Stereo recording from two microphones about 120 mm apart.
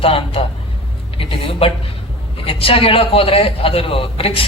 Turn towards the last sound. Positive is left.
turn(degrees=50)  # may be behind; listen again after turning